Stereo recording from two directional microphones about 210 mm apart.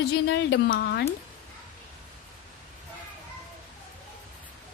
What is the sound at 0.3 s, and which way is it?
Speech, 55° left (ahead or behind).